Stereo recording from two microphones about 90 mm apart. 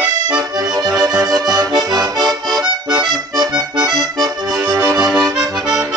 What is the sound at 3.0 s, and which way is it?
Music, 50° right (ahead or behind).